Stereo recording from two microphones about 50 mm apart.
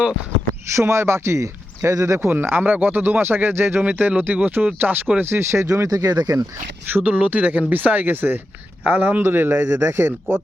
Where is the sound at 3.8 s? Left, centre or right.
Right.